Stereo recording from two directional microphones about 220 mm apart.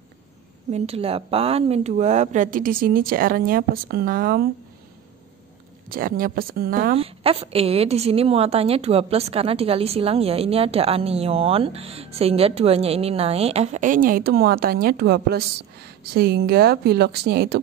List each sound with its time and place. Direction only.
0.7 s speech: 30° right (ahead or behind)
5.9 s speech: 40° right (ahead or behind)
7.0 s a woman's voice: 25° right (ahead or behind); by 17.6 s 45° right (ahead or behind)